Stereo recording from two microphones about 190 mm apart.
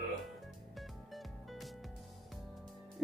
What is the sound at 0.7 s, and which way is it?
Music, centre (ahead or behind).